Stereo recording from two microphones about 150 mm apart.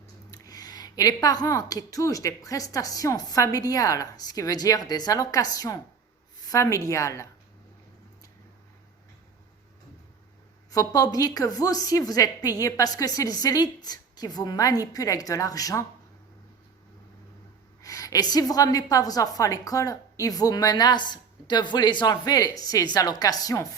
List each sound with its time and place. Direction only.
0.3 s a woman's voice: 25° left (ahead or behind)
10.7 s a woman's voice: 25° left (ahead or behind)
17.8 s a woman's voice: 25° left (ahead or behind)